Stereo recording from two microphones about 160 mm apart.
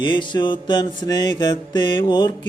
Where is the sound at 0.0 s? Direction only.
30° left (ahead or behind).